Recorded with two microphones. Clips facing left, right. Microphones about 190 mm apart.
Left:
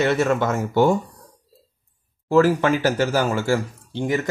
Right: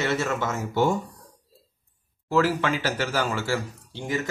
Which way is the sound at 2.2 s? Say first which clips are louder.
Left 6 dB; 50° left (ahead or behind).